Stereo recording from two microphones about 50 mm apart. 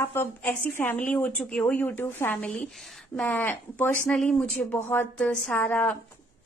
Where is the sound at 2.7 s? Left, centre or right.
Centre.